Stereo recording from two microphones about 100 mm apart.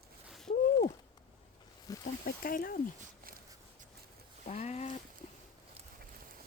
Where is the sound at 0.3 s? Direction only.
Centre (ahead or behind).